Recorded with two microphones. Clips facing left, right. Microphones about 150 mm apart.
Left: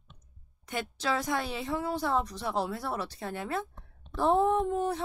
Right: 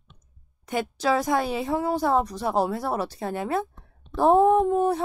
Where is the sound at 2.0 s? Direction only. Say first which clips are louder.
Right 7 dB; 40° right (ahead or behind).